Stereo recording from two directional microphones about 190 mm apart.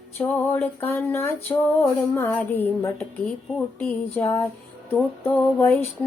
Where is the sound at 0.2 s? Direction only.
10° left (ahead or behind).